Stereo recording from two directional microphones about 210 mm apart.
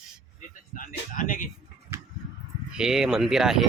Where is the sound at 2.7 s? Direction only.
5° right (ahead or behind).